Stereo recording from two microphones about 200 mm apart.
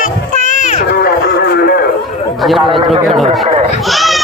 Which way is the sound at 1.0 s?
50° left (ahead or behind).